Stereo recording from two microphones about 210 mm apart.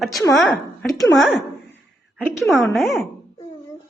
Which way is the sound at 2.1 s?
Centre (ahead or behind).